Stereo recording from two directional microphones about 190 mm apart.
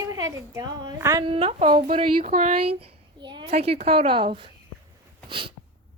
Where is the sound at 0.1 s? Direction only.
15° right (ahead or behind).